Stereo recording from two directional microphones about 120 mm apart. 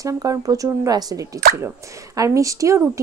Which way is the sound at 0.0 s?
30° right (ahead or behind).